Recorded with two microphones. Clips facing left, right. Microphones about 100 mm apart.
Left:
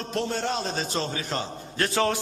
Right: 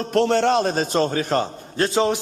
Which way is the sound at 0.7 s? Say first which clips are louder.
Right 8 dB; 50° right (ahead or behind).